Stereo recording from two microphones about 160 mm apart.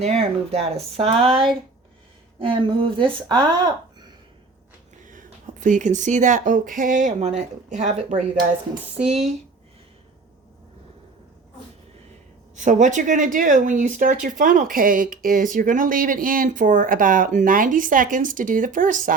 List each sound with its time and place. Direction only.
0.0 s speech: 40° right (ahead or behind)
5.0 s speech: 55° right (ahead or behind)
12.5 s speech: 50° right (ahead or behind)